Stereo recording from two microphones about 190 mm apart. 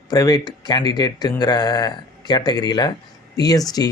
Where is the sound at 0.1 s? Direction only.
20° left (ahead or behind).